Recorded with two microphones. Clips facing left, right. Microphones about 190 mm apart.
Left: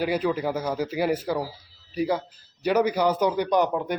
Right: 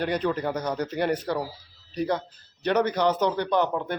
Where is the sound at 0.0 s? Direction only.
5° left (ahead or behind).